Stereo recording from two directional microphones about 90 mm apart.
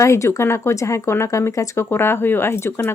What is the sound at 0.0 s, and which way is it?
Speech, 35° left (ahead or behind).